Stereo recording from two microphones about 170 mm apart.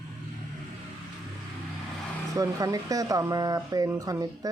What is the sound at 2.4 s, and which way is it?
Speech, 20° right (ahead or behind).